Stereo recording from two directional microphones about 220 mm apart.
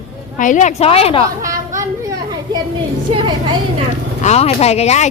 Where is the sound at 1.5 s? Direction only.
35° right (ahead or behind).